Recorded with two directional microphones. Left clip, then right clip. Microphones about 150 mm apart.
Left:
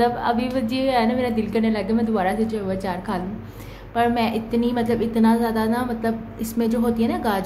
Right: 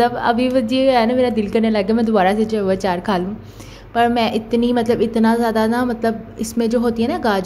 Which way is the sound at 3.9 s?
45° right (ahead or behind).